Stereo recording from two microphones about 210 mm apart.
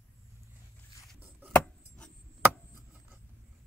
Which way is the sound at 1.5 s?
5° left (ahead or behind).